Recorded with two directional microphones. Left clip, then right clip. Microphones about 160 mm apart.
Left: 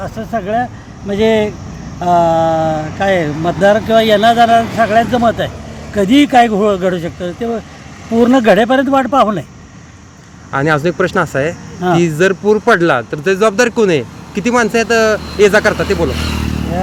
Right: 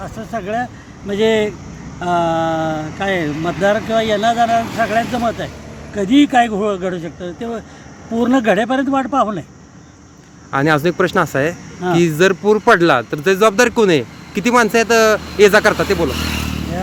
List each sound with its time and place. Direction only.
0.0 s speech: centre (ahead or behind)
10.5 s speech: 20° right (ahead or behind)
16.0 s speech: 65° right (ahead or behind)